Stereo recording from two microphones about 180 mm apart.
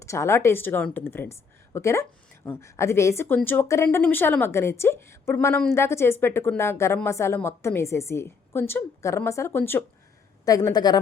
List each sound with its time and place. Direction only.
0.0 s a woman's voice: 15° left (ahead or behind)